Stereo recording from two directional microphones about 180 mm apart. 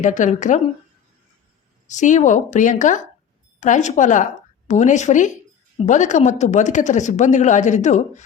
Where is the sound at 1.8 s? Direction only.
45° left (ahead or behind).